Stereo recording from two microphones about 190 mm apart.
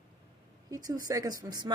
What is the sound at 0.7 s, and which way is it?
Speech, 20° right (ahead or behind).